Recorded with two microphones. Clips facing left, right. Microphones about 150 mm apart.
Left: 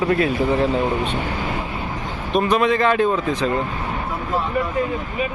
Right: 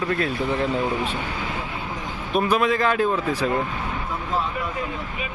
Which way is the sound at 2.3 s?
5° right (ahead or behind).